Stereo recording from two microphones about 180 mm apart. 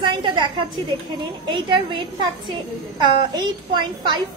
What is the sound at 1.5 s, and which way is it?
A woman's voice, 25° right (ahead or behind).